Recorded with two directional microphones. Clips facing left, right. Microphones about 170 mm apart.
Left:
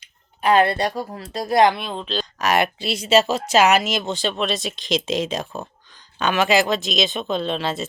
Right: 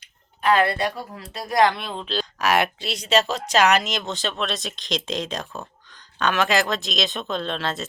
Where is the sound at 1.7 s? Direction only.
Centre (ahead or behind).